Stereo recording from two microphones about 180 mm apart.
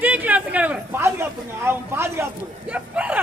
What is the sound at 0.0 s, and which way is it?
Speech, 10° right (ahead or behind).